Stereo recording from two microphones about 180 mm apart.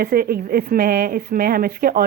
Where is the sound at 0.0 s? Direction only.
55° right (ahead or behind).